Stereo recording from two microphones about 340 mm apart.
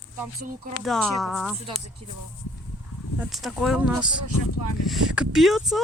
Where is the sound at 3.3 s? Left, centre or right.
Centre.